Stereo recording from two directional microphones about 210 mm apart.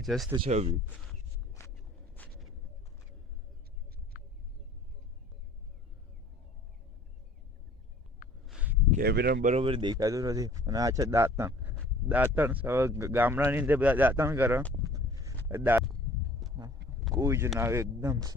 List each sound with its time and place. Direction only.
0.0 s speech: centre (ahead or behind)
0.3 s speech: 30° right (ahead or behind)
2.2 s a sound: 10° left (ahead or behind)
4.1 s bird: 40° left (ahead or behind)
8.4 s a sound: 5° right (ahead or behind)
8.9 s speech: 45° right (ahead or behind)
9.5 s speech: 25° right (ahead or behind); by 14.6 s 10° right (ahead or behind)
14.9 s a sound: 15° right (ahead or behind)
15.4 s speech: 10° right (ahead or behind)
17.2 s speech: 15° right (ahead or behind)